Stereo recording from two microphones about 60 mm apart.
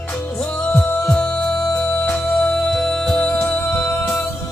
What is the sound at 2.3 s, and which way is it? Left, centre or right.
Music, centre.